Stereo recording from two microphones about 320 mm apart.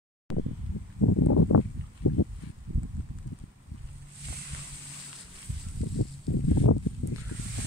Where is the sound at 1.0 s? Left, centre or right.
Left.